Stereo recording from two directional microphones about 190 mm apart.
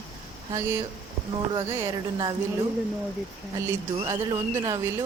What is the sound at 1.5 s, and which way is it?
Speech, 15° right (ahead or behind).